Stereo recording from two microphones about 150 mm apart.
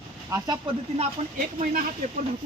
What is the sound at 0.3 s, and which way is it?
Speech, 25° right (ahead or behind).